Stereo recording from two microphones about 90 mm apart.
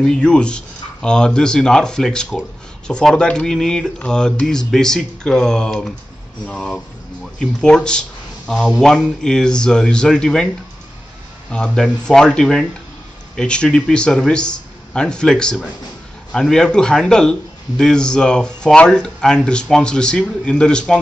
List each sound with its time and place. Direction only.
0.0 s speech: 10° left (ahead or behind)
11.5 s speech: 10° left (ahead or behind)